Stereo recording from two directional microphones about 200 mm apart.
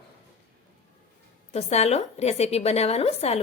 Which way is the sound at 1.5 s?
30° left (ahead or behind).